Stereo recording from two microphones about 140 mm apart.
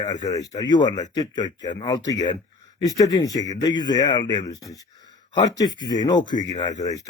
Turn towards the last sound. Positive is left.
turn(degrees=30)  # may be behind; listen again after turning